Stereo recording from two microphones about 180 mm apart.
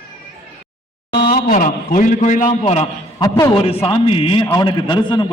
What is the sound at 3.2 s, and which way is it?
Speech, 15° left (ahead or behind).